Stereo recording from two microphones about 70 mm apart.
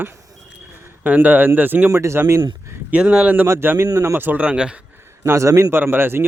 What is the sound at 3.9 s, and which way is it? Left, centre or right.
Speech, right.